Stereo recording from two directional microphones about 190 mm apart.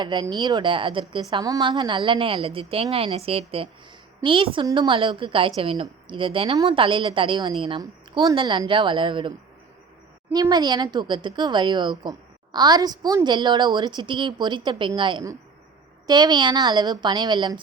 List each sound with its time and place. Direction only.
0.0 s a woman's voice: 25° right (ahead or behind)
10.3 s a woman's voice: 20° right (ahead or behind)